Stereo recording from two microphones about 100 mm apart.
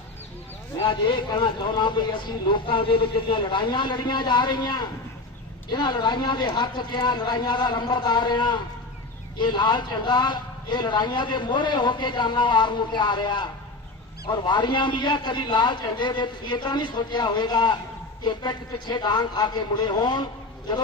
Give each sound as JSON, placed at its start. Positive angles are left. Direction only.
{"t": 0.8, "sound": "speech", "side_deg": 55}